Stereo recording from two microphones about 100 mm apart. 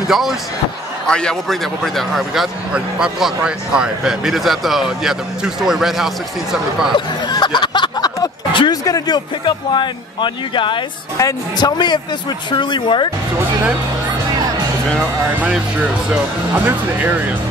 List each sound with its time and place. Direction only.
0.1 s a man's voice: 5° right (ahead or behind)
1.0 s a man's voice: 10° left (ahead or behind)
7.2 s a sound: 50° left (ahead or behind)
8.8 s speech: 40° left (ahead or behind)
11.1 s speech: 40° left (ahead or behind)
15.4 s speech: 15° right (ahead or behind)